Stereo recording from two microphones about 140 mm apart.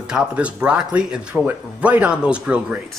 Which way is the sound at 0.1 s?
10° right (ahead or behind).